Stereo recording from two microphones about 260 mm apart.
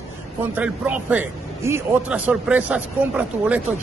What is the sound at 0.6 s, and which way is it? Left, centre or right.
Speech, centre.